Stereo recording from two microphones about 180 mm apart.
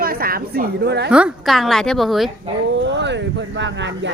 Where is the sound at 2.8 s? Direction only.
80° right.